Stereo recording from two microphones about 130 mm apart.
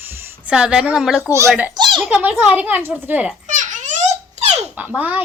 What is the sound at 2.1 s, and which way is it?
Speech, 10° right (ahead or behind).